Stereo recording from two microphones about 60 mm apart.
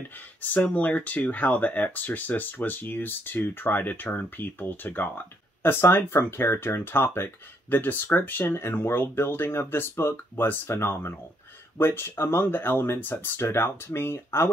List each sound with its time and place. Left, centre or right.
0.4 s speech: left